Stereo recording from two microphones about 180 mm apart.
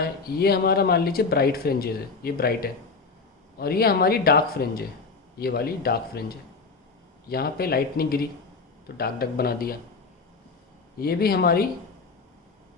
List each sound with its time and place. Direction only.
0.0 s speech: 60° left (ahead or behind)
10.9 s speech: 60° left (ahead or behind)